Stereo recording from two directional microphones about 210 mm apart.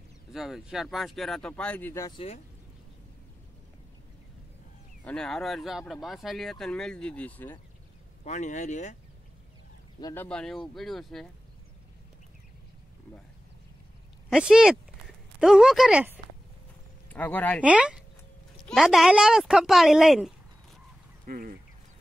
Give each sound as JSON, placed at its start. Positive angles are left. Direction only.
{"t": 0.3, "sound": "speech", "side_deg": 0}
{"t": 5.0, "sound": "speech", "side_deg": 5}
{"t": 8.2, "sound": "speech", "side_deg": 35}
{"t": 9.9, "sound": "speech", "side_deg": 15}
{"t": 10.2, "sound": "speech", "side_deg": 5}
{"t": 14.3, "sound": "speech", "side_deg": -5}
{"t": 17.1, "sound": "speech", "side_deg": 10}
{"t": 17.6, "sound": "speech", "side_deg": -5}
{"t": 21.3, "sound": "speech", "side_deg": -40}